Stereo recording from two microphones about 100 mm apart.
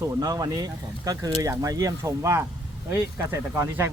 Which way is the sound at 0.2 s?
40° right (ahead or behind).